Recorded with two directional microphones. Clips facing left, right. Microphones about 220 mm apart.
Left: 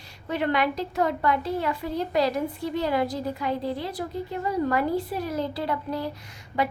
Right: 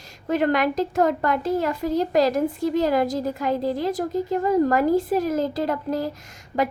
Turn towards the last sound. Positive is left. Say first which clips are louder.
# right 3 dB
turn(degrees=-45)  # may be behind; listen again after turning